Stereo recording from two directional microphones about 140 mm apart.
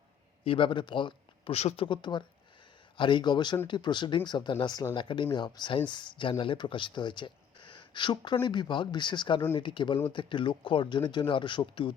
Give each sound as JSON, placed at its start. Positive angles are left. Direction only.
{"t": 0.4, "sound": "speech", "side_deg": 40}